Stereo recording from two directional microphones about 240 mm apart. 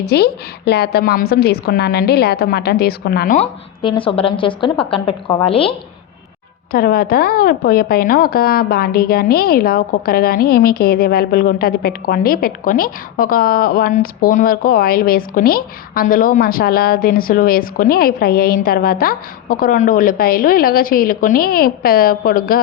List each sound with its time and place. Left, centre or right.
0.0 s a woman's voice: left
6.7 s a woman's voice: left